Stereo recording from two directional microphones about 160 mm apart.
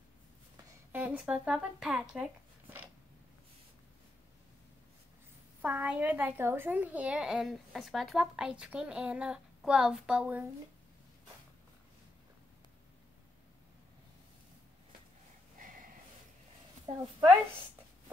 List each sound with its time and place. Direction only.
0.9 s a woman's voice: 10° right (ahead or behind)
5.6 s a woman's voice: 10° right (ahead or behind)
16.9 s a woman's voice: 30° right (ahead or behind)